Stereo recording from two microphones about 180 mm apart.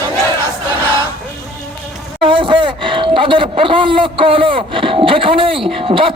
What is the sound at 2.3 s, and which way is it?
Speech, 30° right (ahead or behind).